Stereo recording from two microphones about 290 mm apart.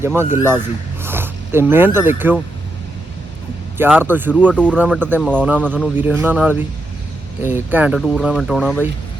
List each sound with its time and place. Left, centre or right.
0.3 s speech: centre
3.8 s speech: centre